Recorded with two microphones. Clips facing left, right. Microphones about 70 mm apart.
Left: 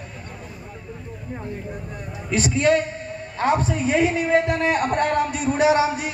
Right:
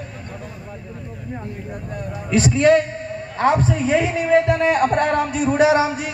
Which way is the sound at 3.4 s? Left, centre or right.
Right.